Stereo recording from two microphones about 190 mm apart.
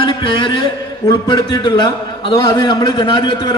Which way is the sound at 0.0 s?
25° left (ahead or behind).